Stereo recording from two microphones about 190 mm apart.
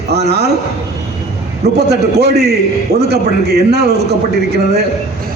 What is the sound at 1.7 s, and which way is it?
A man's voice, 60° right (ahead or behind).